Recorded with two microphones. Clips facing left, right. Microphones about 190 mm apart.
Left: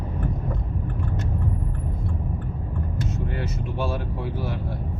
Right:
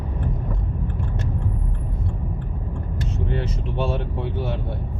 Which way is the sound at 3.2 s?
25° right (ahead or behind).